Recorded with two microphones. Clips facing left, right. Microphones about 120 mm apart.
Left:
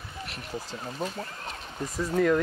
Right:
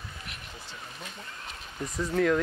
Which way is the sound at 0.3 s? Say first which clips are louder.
Left 8 dB; 35° left (ahead or behind).